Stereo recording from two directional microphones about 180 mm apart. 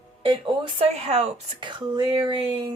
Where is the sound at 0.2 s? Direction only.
30° right (ahead or behind).